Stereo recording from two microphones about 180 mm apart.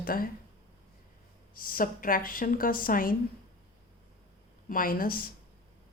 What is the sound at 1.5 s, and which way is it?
A woman's voice, 50° left (ahead or behind).